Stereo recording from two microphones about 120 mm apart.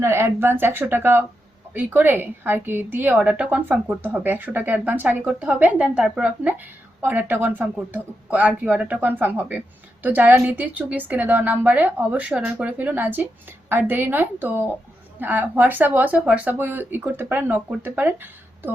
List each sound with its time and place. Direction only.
0.0 s a woman's voice: 20° right (ahead or behind)